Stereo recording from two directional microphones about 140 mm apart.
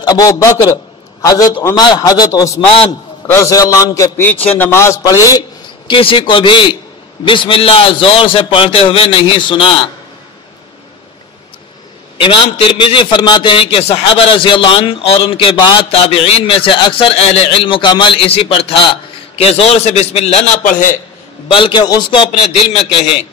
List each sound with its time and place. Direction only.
0.0 s a man's voice: 25° left (ahead or behind)
5.9 s a man's voice: 40° left (ahead or behind)
12.2 s a man's voice: 40° left (ahead or behind)
21.5 s a man's voice: 40° left (ahead or behind)